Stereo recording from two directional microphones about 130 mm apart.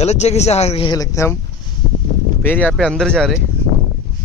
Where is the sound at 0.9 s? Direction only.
25° left (ahead or behind).